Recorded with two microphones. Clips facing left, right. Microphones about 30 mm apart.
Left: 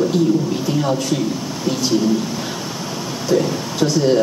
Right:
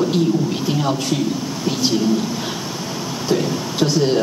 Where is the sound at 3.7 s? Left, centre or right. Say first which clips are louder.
Left 2 dB; centre.